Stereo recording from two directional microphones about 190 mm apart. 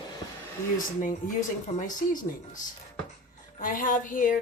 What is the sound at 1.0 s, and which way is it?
Speech, 45° left (ahead or behind).